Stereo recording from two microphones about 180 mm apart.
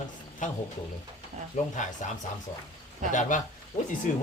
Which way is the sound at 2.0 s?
45° left (ahead or behind).